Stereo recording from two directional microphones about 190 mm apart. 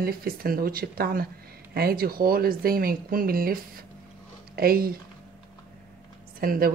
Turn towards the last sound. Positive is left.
turn(degrees=-50)  # may be behind; listen again after turning